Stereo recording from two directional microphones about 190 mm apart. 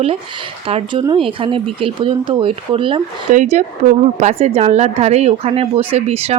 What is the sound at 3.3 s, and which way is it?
A woman's voice, 40° right (ahead or behind).